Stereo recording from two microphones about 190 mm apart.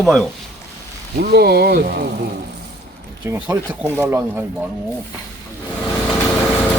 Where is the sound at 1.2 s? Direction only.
55° right (ahead or behind).